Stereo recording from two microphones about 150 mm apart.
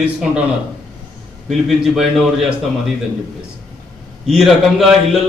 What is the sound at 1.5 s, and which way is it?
A man's voice, centre (ahead or behind).